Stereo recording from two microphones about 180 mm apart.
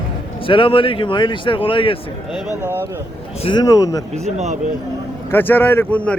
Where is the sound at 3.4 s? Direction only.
25° left (ahead or behind).